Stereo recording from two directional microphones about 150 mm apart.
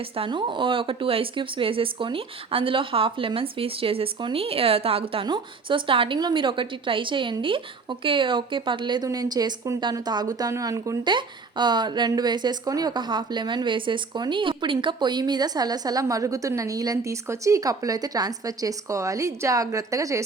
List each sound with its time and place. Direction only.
0.2 s speech: 35° right (ahead or behind)